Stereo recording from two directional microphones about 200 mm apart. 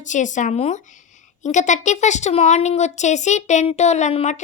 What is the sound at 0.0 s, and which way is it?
A woman's voice, 40° left (ahead or behind).